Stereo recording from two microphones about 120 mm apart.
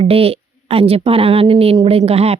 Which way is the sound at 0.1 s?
55° right (ahead or behind).